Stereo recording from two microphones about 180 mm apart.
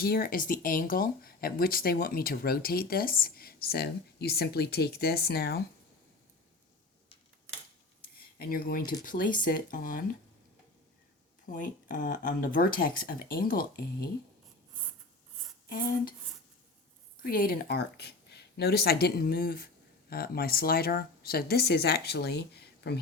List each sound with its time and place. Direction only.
0.0 s speech: 55° left (ahead or behind)
8.0 s a sound: 55° left (ahead or behind)
9.0 s speech: 50° left (ahead or behind)
11.5 s speech: 45° left (ahead or behind)
17.2 s speech: 55° left (ahead or behind)